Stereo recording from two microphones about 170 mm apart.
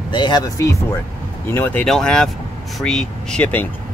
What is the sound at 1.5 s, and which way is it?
Speech, 10° left (ahead or behind).